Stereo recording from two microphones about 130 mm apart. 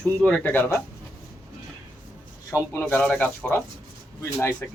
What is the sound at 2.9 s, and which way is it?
Speech, 10° left (ahead or behind).